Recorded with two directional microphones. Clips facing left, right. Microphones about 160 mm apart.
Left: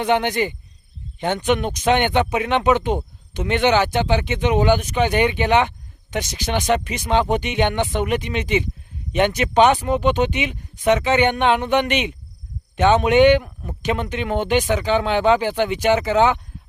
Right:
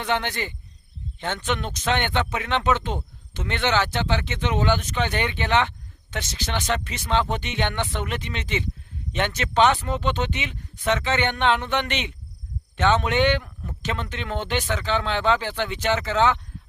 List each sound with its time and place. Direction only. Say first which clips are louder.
0.0 s speech: left 7 dB; 15° left (ahead or behind)